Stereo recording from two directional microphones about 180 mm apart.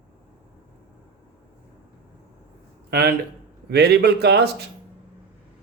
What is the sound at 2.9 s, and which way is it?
A man's voice, 60° right (ahead or behind).